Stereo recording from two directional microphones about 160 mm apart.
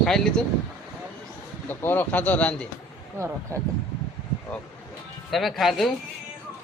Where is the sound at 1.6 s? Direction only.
10° left (ahead or behind).